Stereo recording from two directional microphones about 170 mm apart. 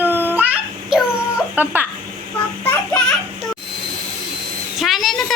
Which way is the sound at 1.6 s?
10° right (ahead or behind).